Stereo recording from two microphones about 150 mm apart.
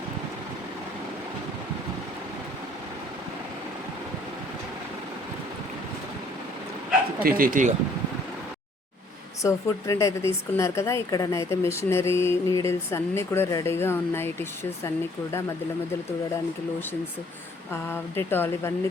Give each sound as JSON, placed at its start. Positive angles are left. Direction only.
{"t": 7.2, "sound": "speech", "side_deg": -75}
{"t": 9.4, "sound": "speech", "side_deg": 20}
{"t": 17.7, "sound": "speech", "side_deg": 15}